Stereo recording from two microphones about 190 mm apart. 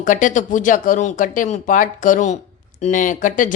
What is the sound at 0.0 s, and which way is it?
Speech, 45° left (ahead or behind).